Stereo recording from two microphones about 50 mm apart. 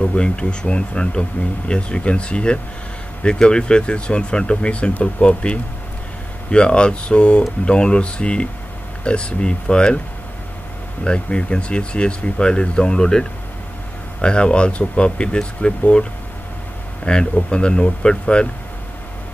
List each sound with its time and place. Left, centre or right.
0.0 s speech: left
11.1 s speech: left